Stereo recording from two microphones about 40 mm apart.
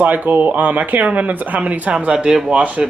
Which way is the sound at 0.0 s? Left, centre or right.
Right.